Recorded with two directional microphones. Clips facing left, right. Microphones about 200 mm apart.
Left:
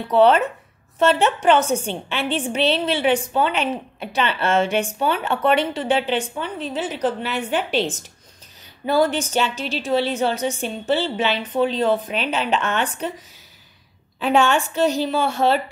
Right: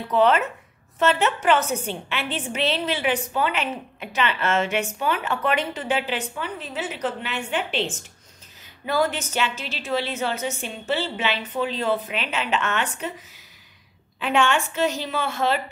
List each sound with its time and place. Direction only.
0.1 s a woman's voice: 30° left (ahead or behind)
14.2 s a woman's voice: 35° left (ahead or behind)